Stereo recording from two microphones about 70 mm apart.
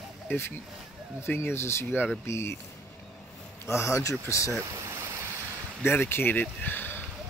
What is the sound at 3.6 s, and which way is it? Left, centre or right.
Speech, left.